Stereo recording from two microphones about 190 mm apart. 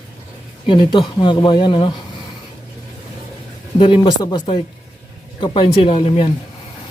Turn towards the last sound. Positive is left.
turn(degrees=30)  # may be behind; listen again after turning